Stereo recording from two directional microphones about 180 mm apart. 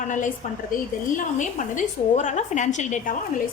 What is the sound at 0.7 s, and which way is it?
A woman's voice, 45° left (ahead or behind).